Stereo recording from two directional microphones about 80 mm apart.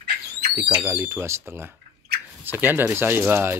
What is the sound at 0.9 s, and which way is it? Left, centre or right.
Speech, right.